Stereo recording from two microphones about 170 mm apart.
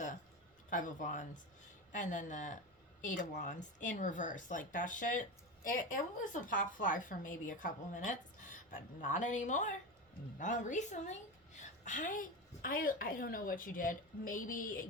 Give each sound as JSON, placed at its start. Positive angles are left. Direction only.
{"t": 0.7, "sound": "a woman's voice", "side_deg": 50}